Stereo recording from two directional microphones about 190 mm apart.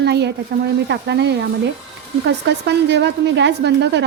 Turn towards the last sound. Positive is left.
turn(degrees=-65)  # may be behind; listen again after turning